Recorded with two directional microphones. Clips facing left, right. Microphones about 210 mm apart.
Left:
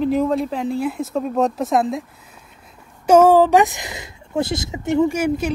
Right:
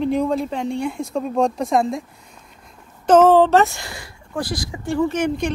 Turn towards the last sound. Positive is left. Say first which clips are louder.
# left 1 dB
turn(degrees=5)  # may be behind; listen again after turning